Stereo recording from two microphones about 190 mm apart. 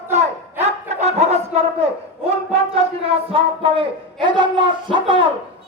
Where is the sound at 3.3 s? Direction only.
25° right (ahead or behind).